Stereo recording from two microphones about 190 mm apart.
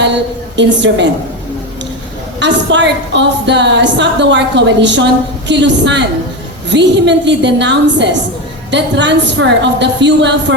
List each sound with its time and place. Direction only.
0.5 s a woman's voice: 70° right (ahead or behind)
2.4 s a woman's voice: 70° right (ahead or behind)